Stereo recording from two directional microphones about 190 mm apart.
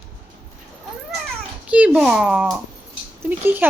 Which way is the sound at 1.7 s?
5° right (ahead or behind).